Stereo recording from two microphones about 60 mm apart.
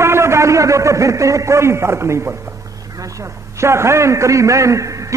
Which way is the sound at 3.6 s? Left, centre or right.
Right.